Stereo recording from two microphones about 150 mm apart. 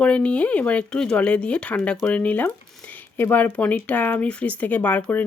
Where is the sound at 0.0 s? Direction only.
5° left (ahead or behind).